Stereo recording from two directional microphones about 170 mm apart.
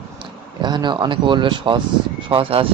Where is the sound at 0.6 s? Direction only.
25° right (ahead or behind).